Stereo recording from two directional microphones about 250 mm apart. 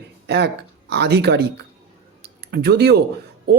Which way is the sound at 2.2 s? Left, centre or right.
Right.